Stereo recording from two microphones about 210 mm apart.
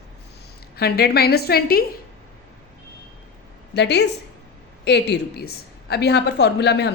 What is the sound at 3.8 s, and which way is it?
A woman's voice, 55° left (ahead or behind).